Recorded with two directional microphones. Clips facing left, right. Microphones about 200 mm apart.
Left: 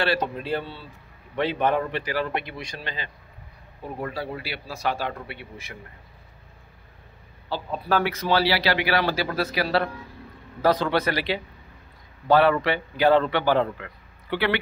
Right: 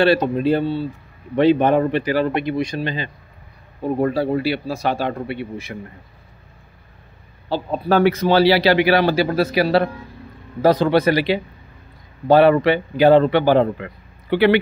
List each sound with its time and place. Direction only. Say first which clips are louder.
0.0 s a man's voice: right 10 dB; 20° right (ahead or behind)
4.0 s a man's voice: right 12 dB; 35° right (ahead or behind)
7.9 s a man's voice: right 8 dB; 20° right (ahead or behind)